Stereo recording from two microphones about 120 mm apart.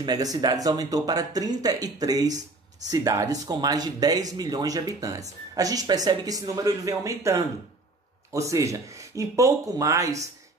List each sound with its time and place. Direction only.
0.0 s speech: 30° right (ahead or behind)